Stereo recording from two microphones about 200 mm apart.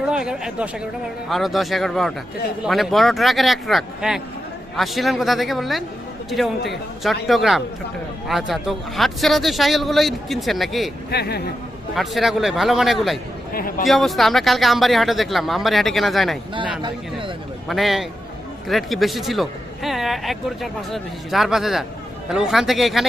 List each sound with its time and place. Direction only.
0.0 s speech: 5° right (ahead or behind)
7.0 s speech: centre (ahead or behind)
11.1 s a man's voice: 55° left (ahead or behind)
11.9 s speech: centre (ahead or behind)
13.5 s a man's voice: 45° left (ahead or behind)
13.8 s speech: centre (ahead or behind)
16.8 s speech: 25° right (ahead or behind)
17.7 s speech: centre (ahead or behind)